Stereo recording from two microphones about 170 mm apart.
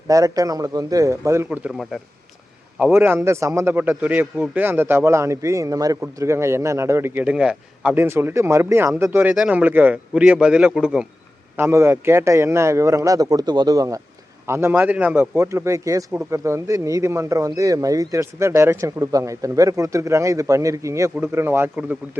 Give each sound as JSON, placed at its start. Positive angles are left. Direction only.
{"t": 0.1, "sound": "a man's voice", "side_deg": -20}
{"t": 11.5, "sound": "a man's voice", "side_deg": -15}